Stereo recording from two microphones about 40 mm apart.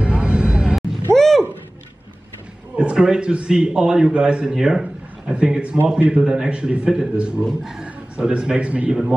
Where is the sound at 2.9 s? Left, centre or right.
Right.